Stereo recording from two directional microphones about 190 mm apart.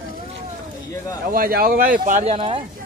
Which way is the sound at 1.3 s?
50° right (ahead or behind).